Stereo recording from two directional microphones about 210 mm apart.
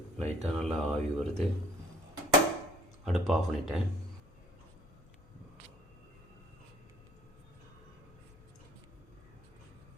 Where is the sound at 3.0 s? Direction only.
Centre (ahead or behind).